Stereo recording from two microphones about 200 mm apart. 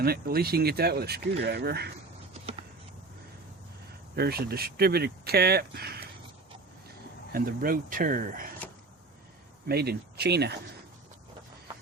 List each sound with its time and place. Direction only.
0.0 s speech: 50° right (ahead or behind)
4.1 s speech: 50° right (ahead or behind)
7.3 s speech: 45° right (ahead or behind)
9.6 s speech: 50° right (ahead or behind)